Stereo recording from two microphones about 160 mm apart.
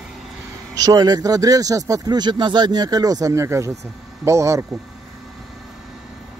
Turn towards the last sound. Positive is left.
turn(degrees=-20)  # may be behind; listen again after turning